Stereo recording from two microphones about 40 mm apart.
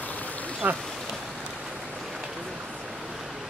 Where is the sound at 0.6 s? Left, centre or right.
Right.